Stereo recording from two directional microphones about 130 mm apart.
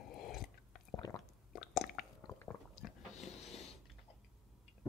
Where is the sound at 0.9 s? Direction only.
30° left (ahead or behind).